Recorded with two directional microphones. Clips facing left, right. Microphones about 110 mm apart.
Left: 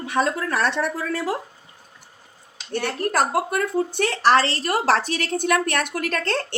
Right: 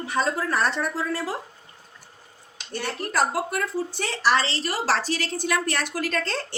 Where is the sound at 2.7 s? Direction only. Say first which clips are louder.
Left 3 dB; 55° left (ahead or behind).